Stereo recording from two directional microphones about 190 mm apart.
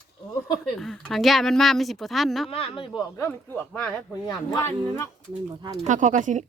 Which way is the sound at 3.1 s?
10° left (ahead or behind).